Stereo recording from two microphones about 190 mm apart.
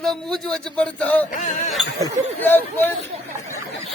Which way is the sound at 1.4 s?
40° left (ahead or behind).